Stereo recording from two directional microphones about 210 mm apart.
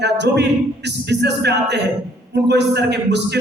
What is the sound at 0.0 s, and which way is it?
A man's voice, 55° right (ahead or behind).